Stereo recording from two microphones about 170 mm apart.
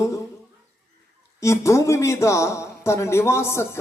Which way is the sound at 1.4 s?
15° left (ahead or behind).